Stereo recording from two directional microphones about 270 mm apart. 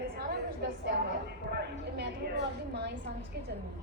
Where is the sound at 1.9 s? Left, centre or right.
Right.